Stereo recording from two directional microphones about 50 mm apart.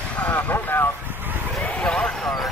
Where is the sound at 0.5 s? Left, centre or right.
Left.